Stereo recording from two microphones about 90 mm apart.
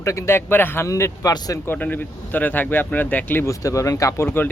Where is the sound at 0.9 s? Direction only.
35° left (ahead or behind).